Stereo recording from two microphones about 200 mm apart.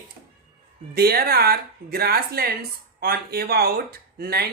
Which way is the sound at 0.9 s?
50° right (ahead or behind).